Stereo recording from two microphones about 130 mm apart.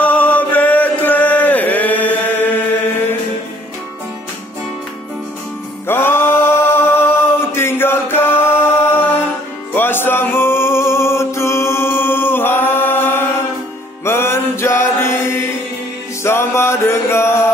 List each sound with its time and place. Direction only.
0.0 s chant: 10° left (ahead or behind)
5.9 s singing: 15° left (ahead or behind)
9.8 s music: 15° left (ahead or behind)